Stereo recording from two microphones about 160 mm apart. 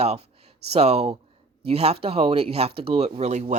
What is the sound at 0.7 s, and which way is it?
Speech, 40° right (ahead or behind).